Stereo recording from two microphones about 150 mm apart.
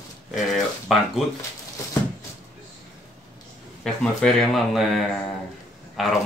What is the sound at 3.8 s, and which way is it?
Speech, centre (ahead or behind).